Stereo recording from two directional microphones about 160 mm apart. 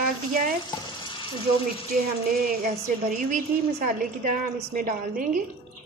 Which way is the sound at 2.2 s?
65° right (ahead or behind).